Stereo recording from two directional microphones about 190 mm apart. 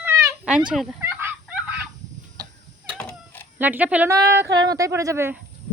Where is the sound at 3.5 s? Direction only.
10° right (ahead or behind).